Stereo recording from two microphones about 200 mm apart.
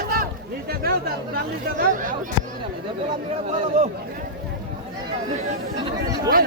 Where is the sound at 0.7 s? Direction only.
50° right (ahead or behind).